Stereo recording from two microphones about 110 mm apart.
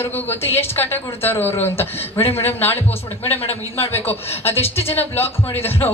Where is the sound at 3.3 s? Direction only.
65° left (ahead or behind).